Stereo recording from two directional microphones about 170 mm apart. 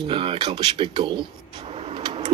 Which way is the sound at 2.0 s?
30° right (ahead or behind).